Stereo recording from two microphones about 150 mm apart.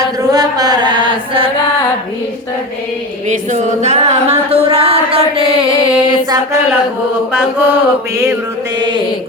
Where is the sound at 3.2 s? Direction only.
55° right (ahead or behind).